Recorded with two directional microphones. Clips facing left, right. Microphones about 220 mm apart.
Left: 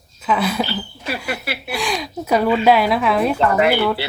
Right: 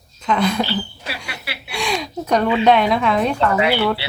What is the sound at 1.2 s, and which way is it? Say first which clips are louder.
Speech: left 7 dB; 45° left (ahead or behind).